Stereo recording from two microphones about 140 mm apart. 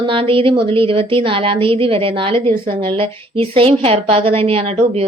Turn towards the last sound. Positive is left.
turn(degrees=-45)  # may be behind; listen again after turning